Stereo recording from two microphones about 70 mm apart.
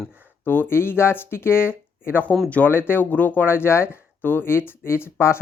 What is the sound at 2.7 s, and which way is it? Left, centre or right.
Speech, left.